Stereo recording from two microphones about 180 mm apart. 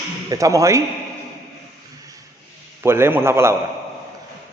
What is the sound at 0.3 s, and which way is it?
Speech, 20° right (ahead or behind).